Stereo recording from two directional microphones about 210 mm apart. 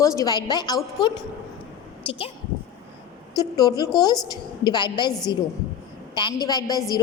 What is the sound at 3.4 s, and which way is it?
A woman's voice, 20° left (ahead or behind).